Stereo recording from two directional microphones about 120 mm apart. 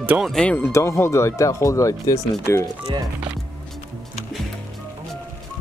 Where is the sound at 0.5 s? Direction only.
20° left (ahead or behind).